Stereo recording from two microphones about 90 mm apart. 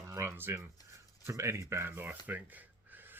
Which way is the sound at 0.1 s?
30° right (ahead or behind).